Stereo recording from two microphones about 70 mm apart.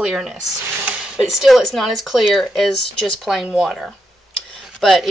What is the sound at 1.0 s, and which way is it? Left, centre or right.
Speech, centre.